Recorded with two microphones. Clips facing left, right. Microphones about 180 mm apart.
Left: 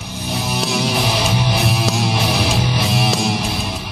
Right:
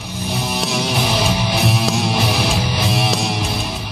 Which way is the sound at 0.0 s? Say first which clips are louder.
Right 1 dB; centre (ahead or behind).